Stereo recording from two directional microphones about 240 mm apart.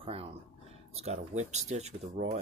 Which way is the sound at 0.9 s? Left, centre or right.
Right.